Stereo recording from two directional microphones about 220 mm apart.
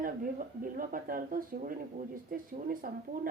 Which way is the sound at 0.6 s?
40° right (ahead or behind).